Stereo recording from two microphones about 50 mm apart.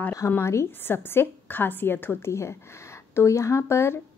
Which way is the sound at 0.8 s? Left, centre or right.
Left.